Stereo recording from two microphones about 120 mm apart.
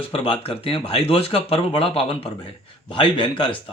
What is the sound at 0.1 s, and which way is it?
Speech, 50° left (ahead or behind).